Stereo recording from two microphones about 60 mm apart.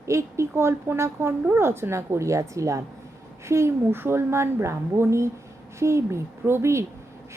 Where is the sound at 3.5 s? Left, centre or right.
Right.